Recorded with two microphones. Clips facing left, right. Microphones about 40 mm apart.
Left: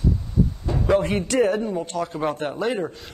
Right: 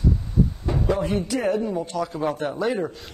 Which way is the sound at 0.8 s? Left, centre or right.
Left.